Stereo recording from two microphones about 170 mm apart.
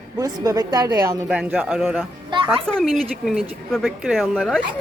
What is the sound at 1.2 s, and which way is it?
A child's voice, 10° right (ahead or behind).